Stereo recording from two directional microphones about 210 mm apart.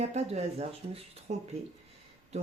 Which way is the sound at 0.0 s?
30° right (ahead or behind).